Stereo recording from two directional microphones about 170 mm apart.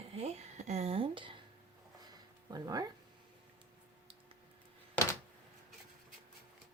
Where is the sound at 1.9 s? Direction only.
25° right (ahead or behind).